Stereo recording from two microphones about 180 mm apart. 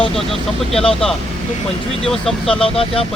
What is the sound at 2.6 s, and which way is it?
Speech, 30° left (ahead or behind).